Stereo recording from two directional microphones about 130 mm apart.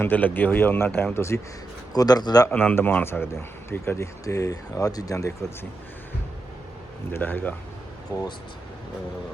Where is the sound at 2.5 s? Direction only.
15° left (ahead or behind).